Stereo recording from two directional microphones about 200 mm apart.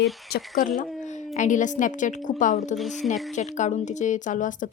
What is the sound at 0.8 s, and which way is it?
A woman's voice, 35° left (ahead or behind).